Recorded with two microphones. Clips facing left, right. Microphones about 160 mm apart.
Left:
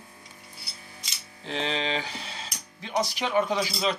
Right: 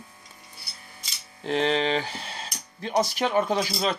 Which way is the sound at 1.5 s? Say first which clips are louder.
Right 6 dB; 50° right (ahead or behind).